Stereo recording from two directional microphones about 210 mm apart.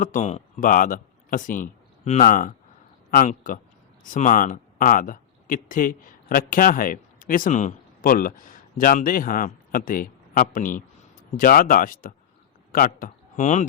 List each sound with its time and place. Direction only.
0.0 s a man's voice: 35° left (ahead or behind)